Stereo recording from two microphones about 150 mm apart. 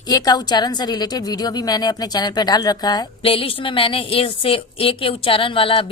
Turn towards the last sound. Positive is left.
turn(degrees=35)  # may be behind; listen again after turning